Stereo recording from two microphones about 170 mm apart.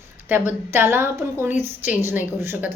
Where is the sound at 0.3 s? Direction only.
15° right (ahead or behind).